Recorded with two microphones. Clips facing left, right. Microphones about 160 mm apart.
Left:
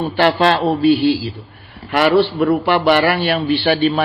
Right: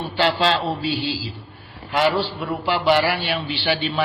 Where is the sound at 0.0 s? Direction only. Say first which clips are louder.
Left 6 dB; 55° left (ahead or behind).